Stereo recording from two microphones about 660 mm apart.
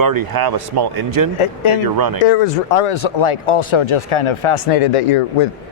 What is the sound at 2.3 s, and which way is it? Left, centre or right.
Speech, left.